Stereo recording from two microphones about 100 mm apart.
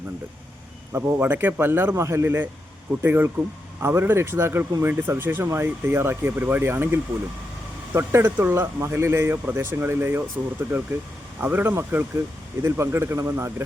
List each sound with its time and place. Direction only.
0.9 s speech: 20° right (ahead or behind)